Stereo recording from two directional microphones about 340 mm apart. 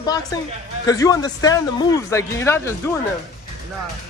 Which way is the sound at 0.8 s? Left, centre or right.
Centre.